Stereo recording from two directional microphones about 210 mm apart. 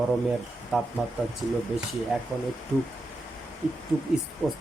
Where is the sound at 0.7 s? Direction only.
Centre (ahead or behind).